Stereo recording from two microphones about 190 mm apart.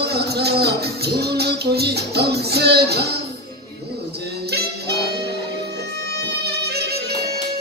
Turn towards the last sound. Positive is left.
turn(degrees=-60)  # may be behind; listen again after turning